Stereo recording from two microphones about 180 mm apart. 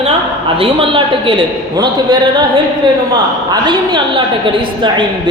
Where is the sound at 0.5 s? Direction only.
30° right (ahead or behind).